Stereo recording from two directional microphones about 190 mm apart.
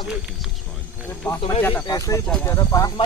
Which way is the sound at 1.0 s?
10° left (ahead or behind).